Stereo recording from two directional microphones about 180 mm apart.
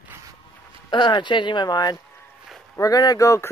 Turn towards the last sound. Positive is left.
turn(degrees=15)  # may be behind; listen again after turning